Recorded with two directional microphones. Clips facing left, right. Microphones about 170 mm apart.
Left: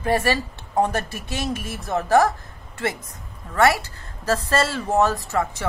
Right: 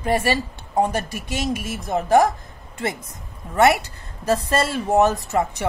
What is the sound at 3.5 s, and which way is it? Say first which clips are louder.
A woman's voice: right 2 dB; 20° right (ahead or behind).